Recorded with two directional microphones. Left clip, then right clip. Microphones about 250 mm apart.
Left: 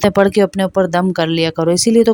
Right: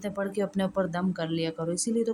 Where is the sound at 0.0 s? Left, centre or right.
Left.